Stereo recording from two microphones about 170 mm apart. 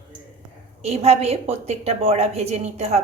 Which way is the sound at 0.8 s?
40° right (ahead or behind).